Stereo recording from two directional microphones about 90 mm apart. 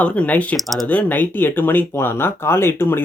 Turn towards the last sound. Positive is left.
turn(degrees=25)  # may be behind; listen again after turning